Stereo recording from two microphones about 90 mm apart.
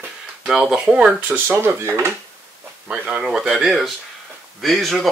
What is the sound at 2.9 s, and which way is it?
Speech, 10° right (ahead or behind).